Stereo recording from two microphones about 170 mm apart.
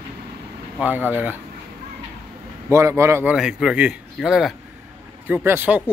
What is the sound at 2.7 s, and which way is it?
Speech, 15° right (ahead or behind).